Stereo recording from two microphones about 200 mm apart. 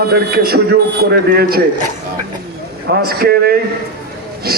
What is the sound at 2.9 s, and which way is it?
Speech, 50° right (ahead or behind).